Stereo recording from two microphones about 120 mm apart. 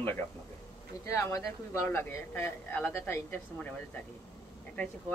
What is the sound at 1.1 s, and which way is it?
A woman's voice, 25° left (ahead or behind).